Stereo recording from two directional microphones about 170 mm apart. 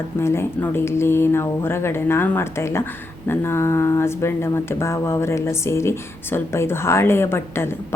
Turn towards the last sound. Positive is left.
turn(degrees=15)  # may be behind; listen again after turning